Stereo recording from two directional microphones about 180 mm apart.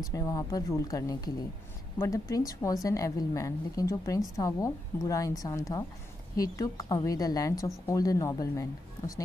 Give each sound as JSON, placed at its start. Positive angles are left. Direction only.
{"t": 0.0, "sound": "a woman's voice", "side_deg": 20}